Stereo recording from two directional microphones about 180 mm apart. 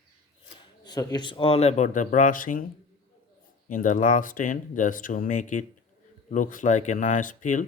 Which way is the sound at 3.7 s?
45° left (ahead or behind).